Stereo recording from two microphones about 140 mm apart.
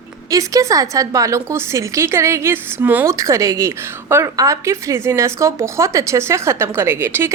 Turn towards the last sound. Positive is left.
turn(degrees=-15)  # may be behind; listen again after turning